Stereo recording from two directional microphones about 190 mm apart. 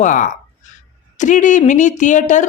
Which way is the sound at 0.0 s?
40° left (ahead or behind).